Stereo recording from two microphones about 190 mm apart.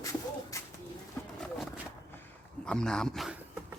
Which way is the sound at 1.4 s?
Centre (ahead or behind).